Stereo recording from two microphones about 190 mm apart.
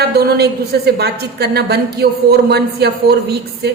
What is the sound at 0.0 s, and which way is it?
A woman's voice, 60° right (ahead or behind).